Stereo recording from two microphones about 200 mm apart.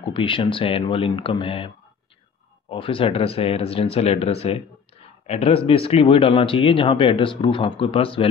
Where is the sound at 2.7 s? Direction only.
25° left (ahead or behind).